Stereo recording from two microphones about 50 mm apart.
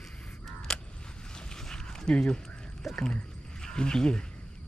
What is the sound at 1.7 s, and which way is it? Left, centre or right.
Dog, centre.